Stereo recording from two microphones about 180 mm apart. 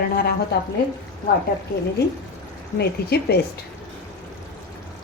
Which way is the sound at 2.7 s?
65° left (ahead or behind).